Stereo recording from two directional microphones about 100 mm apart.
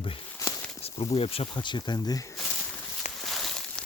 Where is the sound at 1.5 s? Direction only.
50° left (ahead or behind).